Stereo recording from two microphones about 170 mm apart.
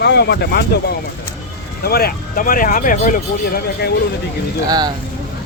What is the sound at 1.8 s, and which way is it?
Speech, 65° left (ahead or behind).